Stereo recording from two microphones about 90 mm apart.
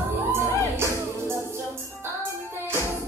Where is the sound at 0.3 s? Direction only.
30° right (ahead or behind).